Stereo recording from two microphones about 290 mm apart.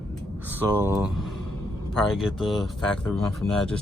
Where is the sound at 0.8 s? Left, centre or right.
Centre.